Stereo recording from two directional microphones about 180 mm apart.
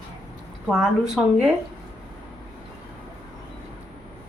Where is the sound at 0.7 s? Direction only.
Centre (ahead or behind).